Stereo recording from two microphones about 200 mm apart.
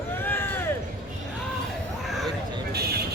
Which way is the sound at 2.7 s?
55° right (ahead or behind).